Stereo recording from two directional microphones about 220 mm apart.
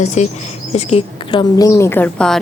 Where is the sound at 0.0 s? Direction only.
30° left (ahead or behind).